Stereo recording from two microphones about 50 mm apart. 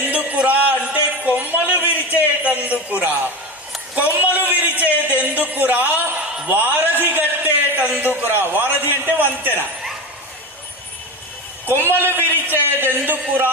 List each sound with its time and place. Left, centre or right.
0.1 s a sound: right
3.9 s a man's voice: right
11.8 s a man's voice: right